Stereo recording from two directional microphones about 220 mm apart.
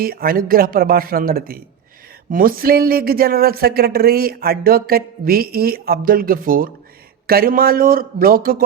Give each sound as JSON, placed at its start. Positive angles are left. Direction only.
{"t": 0.0, "sound": "speech", "side_deg": -40}